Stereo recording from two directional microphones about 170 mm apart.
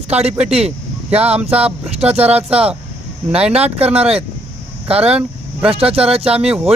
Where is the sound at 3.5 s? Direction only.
35° right (ahead or behind).